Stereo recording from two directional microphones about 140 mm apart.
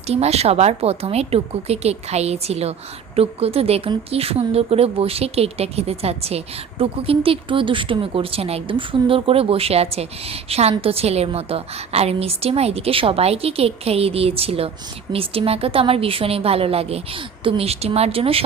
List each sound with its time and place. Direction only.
0.1 s speech: 50° right (ahead or behind)